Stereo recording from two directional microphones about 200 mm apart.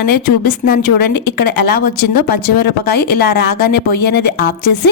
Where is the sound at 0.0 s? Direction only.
50° left (ahead or behind).